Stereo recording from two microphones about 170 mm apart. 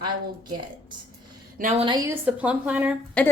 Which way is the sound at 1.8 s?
30° right (ahead or behind).